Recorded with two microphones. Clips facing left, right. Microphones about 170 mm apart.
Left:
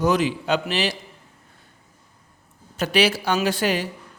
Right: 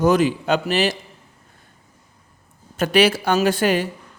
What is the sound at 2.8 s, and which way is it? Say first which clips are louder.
A man's voice: right 4 dB; 50° right (ahead or behind).